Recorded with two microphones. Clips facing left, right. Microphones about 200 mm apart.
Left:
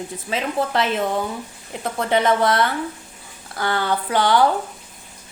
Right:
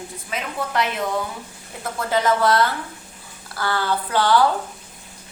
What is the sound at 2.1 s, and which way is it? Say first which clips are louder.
Speech: left 1 dB; 20° left (ahead or behind).